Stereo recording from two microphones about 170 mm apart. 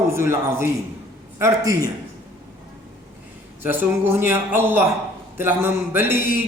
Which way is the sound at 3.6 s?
15° right (ahead or behind).